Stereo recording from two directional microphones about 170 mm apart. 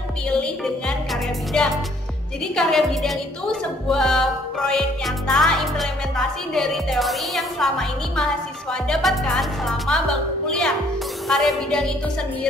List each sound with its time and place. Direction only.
1.5 s music: 5° left (ahead or behind)
11.2 s music: 5° left (ahead or behind)